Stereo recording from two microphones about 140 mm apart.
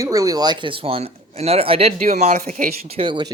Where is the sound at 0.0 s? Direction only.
25° right (ahead or behind); by 2.6 s 55° right (ahead or behind).